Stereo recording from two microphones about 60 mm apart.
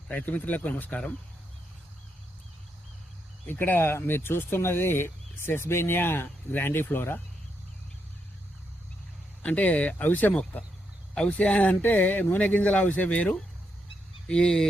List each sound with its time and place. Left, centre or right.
0.1 s speech: left
3.5 s speech: left
9.4 s speech: left
14.3 s speech: centre